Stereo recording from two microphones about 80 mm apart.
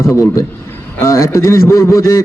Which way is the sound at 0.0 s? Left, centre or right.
Left.